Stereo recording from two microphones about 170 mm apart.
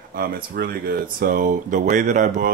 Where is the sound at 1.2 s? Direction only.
55° right (ahead or behind).